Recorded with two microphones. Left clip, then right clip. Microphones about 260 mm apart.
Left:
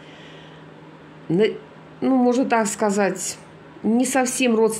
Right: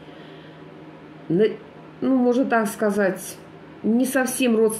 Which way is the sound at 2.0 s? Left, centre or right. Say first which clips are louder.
Left 1 dB; left.